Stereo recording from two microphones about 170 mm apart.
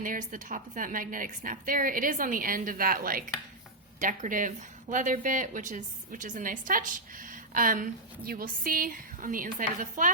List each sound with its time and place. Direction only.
0.0 s speech: 50° right (ahead or behind)